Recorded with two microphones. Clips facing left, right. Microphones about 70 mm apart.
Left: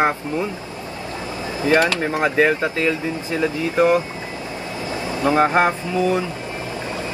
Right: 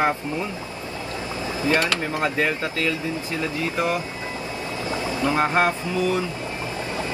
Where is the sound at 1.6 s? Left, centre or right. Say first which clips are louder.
Left 5 dB; left.